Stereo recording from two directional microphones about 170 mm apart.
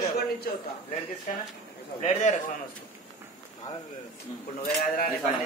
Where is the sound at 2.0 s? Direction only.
45° left (ahead or behind).